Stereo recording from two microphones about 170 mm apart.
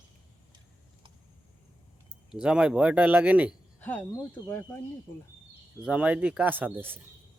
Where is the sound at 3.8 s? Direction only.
10° left (ahead or behind).